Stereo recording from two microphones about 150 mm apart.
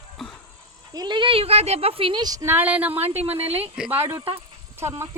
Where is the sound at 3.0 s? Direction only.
45° right (ahead or behind).